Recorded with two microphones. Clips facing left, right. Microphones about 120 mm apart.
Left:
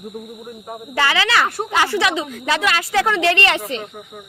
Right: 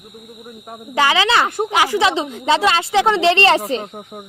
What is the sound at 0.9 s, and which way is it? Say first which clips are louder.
A woman's voice: right 3 dB; 15° right (ahead or behind).